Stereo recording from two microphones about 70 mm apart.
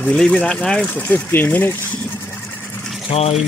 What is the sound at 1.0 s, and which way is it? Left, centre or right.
Speech, left.